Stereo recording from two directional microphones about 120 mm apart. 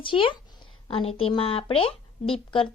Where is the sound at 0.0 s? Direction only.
45° left (ahead or behind).